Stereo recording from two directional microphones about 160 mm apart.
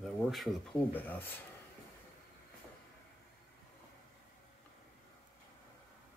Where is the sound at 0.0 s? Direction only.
Centre (ahead or behind).